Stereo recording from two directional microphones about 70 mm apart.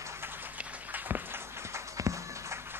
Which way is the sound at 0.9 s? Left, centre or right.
Right.